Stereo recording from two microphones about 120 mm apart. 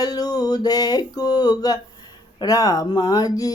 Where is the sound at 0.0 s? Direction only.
35° left (ahead or behind).